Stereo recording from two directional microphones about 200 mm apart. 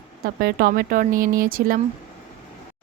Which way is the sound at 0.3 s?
50° right (ahead or behind).